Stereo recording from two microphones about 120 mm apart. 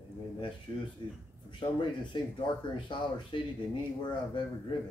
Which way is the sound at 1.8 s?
40° left (ahead or behind).